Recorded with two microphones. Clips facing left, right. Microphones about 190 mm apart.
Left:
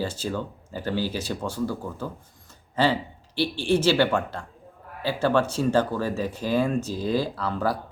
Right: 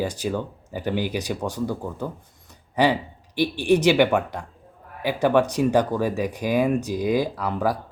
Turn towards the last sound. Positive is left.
turn(degrees=-15)  # may be behind; listen again after turning